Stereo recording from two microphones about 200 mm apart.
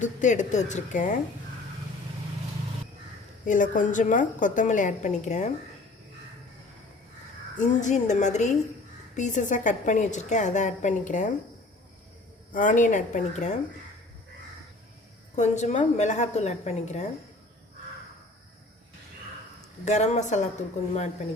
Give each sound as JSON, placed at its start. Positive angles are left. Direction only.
{"t": 0.0, "sound": "a woman's voice", "side_deg": 40}
{"t": 3.4, "sound": "a woman's voice", "side_deg": 40}
{"t": 7.6, "sound": "a woman's voice", "side_deg": 35}
{"t": 12.5, "sound": "a woman's voice", "side_deg": 40}
{"t": 15.4, "sound": "a woman's voice", "side_deg": 35}
{"t": 19.8, "sound": "a woman's voice", "side_deg": 35}